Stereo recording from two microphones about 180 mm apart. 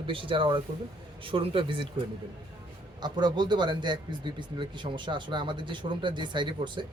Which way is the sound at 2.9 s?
25° right (ahead or behind).